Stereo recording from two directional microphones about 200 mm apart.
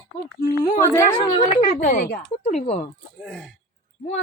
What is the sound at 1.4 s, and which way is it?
Speech, 35° left (ahead or behind).